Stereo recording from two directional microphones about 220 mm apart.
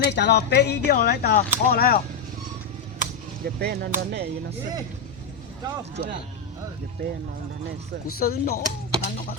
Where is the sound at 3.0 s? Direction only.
45° right (ahead or behind).